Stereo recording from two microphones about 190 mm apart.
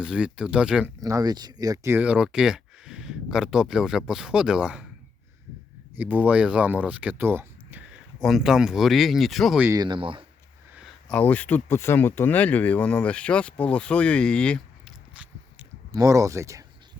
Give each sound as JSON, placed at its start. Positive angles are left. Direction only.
{"t": 0.0, "sound": "speech", "side_deg": -5}
{"t": 1.0, "sound": "speech", "side_deg": -20}
{"t": 6.0, "sound": "speech", "side_deg": -10}
{"t": 9.6, "sound": "speech", "side_deg": -20}
{"t": 10.8, "sound": "speech", "side_deg": 0}
{"t": 15.1, "sound": "biting", "side_deg": -5}
{"t": 15.9, "sound": "speech", "side_deg": -15}